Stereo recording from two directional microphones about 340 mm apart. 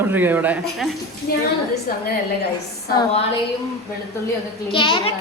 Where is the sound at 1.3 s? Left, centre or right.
Left.